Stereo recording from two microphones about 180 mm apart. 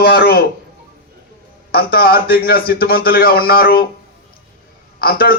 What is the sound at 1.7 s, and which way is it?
A man's voice, 55° left (ahead or behind).